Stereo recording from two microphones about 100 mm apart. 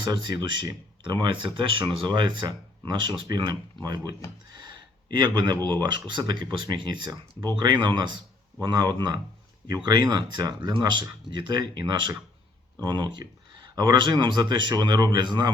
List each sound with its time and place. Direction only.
1.0 s speech: 50° right (ahead or behind)
4.5 s a sound: 45° right (ahead or behind)
5.6 s speech: 45° right (ahead or behind)